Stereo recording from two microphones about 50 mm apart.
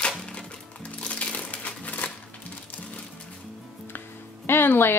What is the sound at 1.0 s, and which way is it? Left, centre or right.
Crushing, left.